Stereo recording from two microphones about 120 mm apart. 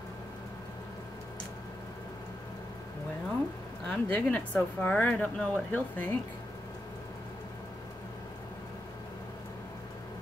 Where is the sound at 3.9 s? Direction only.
15° left (ahead or behind).